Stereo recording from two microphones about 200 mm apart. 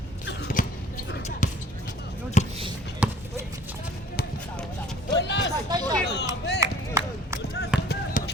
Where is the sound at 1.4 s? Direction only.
40° left (ahead or behind).